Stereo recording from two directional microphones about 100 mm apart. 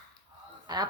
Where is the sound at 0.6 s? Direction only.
40° right (ahead or behind).